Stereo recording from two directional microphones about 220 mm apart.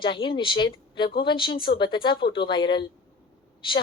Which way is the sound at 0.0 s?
20° left (ahead or behind).